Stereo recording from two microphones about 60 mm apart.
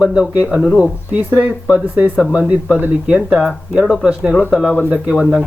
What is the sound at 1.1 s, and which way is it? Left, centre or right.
Speech, right.